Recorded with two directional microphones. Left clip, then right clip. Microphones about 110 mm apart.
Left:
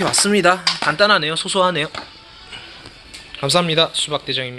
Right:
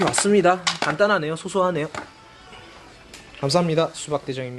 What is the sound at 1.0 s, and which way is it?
Speech, 20° right (ahead or behind).